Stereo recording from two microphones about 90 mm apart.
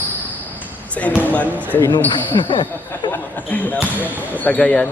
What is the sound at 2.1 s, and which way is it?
Speech, 70° left (ahead or behind).